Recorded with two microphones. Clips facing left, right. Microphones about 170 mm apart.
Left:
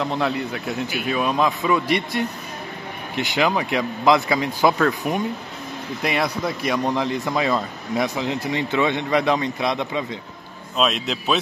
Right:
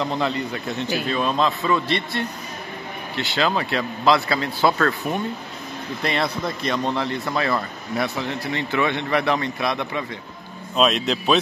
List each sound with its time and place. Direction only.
0.0 s a man's voice: 5° left (ahead or behind); by 10.0 s 20° left (ahead or behind)
10.8 s a man's voice: centre (ahead or behind)